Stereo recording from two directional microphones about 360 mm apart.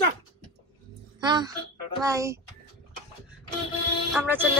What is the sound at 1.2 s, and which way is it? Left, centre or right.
Speech, centre.